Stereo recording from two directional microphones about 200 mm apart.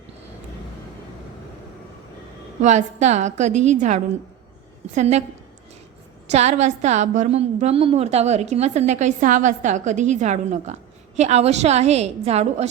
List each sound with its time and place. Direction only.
2.6 s a woman's voice: 35° right (ahead or behind)
6.3 s a woman's voice: 35° right (ahead or behind)